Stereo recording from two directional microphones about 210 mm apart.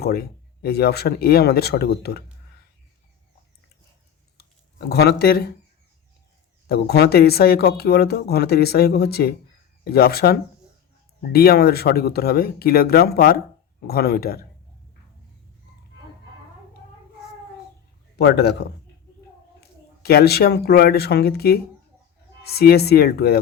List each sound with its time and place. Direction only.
0.0 s speech: 45° left (ahead or behind)
4.9 s speech: 50° left (ahead or behind)
6.7 s speech: 50° left (ahead or behind)
18.2 s speech: 50° left (ahead or behind)
20.0 s speech: 50° left (ahead or behind)